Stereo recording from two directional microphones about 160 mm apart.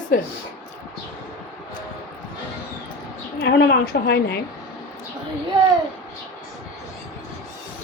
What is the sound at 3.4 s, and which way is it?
Speech, 90° left.